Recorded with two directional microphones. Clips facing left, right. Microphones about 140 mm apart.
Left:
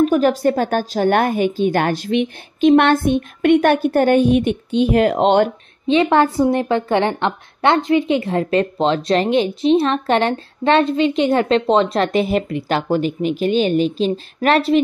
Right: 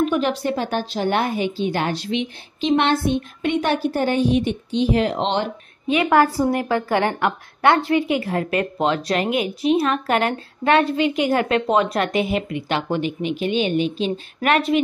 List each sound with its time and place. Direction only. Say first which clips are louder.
0.0 s a woman's voice: left 6 dB; 45° left (ahead or behind)
5.9 s a woman's voice: left 3 dB; 25° left (ahead or behind)